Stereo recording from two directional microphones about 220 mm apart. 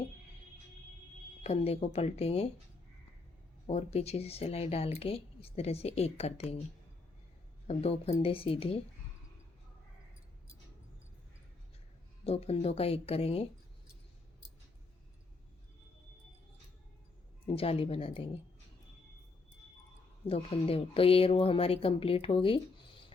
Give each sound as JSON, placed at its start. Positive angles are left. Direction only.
{"t": 1.5, "sound": "speech", "side_deg": 30}
{"t": 3.7, "sound": "speech", "side_deg": 30}
{"t": 7.7, "sound": "speech", "side_deg": 25}
{"t": 12.2, "sound": "speech", "side_deg": 25}
{"t": 17.4, "sound": "speech", "side_deg": 25}
{"t": 20.2, "sound": "speech", "side_deg": 25}